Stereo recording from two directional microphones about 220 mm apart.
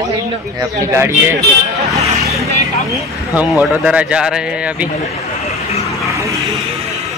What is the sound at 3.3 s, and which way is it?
Speech, 5° right (ahead or behind).